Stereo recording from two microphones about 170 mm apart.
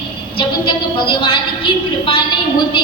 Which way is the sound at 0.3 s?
30° left (ahead or behind).